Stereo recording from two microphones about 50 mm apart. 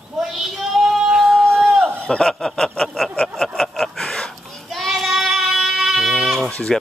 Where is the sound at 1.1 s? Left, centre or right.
Centre.